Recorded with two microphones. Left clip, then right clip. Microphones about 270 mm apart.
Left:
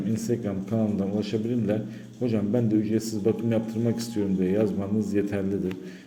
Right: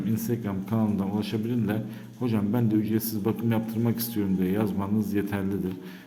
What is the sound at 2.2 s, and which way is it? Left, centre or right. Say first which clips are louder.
A man's voice: left 2 dB; centre.